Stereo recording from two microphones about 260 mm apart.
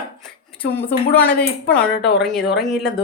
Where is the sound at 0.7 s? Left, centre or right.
Centre.